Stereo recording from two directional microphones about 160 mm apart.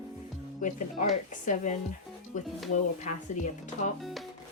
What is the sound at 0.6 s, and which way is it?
Speech, 55° left (ahead or behind).